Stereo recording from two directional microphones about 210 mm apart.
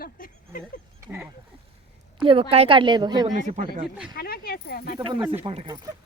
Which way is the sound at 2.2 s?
25° right (ahead or behind).